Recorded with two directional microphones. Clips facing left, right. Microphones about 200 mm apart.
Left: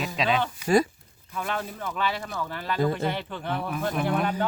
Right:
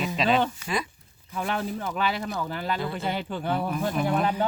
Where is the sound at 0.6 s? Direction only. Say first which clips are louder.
Left 9 dB; 40° left (ahead or behind).